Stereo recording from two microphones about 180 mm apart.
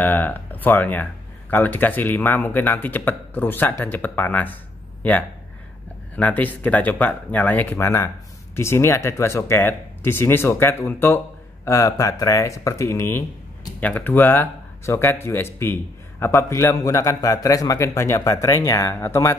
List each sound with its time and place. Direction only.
0.0 s speech: 10° left (ahead or behind)
6.1 s speech: 10° left (ahead or behind)